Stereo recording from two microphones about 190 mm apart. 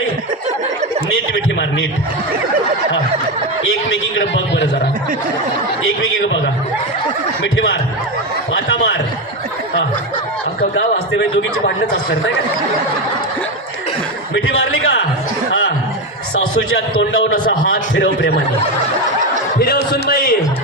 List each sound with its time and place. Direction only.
4.2 s a sound: 70° left (ahead or behind)
6.0 s a man's voice: 80° left
7.4 s speech: 75° left (ahead or behind)
10.8 s a man's voice: 65° left (ahead or behind)
14.3 s a man's voice: 85° left
16.6 s a man's voice: 80° left
19.5 s a sound: 55° left (ahead or behind)